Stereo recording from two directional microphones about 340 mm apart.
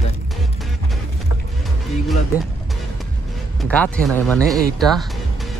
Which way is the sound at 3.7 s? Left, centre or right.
Centre.